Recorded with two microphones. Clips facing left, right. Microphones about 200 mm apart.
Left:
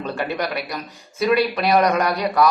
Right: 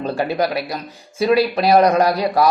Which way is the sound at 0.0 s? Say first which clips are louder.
Right 5 dB; 35° right (ahead or behind).